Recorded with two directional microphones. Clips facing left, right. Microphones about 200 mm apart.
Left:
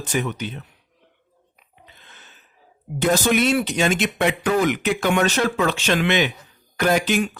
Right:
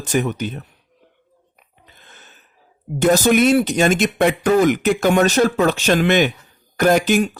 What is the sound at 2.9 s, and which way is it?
Speech, 45° right (ahead or behind).